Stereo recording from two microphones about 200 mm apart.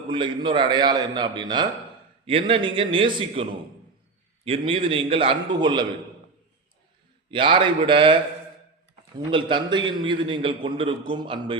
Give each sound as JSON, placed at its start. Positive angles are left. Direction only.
{"t": 0.1, "sound": "a man's voice", "side_deg": -25}
{"t": 4.4, "sound": "a man's voice", "side_deg": -25}
{"t": 7.3, "sound": "a man's voice", "side_deg": -25}